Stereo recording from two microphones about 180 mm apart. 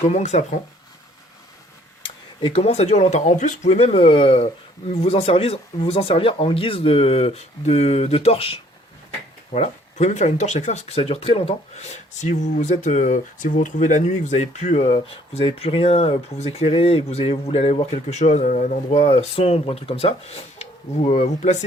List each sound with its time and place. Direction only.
0.1 s speech: 40° left (ahead or behind)
2.0 s speech: 30° left (ahead or behind)